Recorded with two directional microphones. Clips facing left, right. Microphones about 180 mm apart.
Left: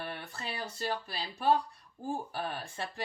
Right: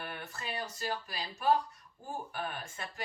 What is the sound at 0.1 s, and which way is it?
Speech, 30° left (ahead or behind).